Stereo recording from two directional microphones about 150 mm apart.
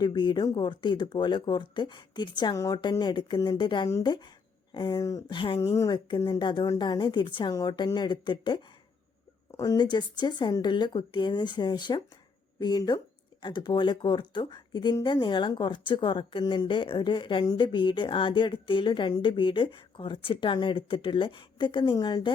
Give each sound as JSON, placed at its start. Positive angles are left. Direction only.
{"t": 0.0, "sound": "speech", "side_deg": 30}